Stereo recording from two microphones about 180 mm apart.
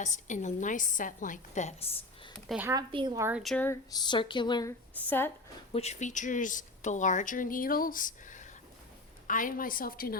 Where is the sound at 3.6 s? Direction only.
20° left (ahead or behind).